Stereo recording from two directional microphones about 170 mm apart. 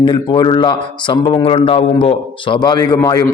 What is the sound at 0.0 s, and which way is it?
A man's voice, 30° left (ahead or behind).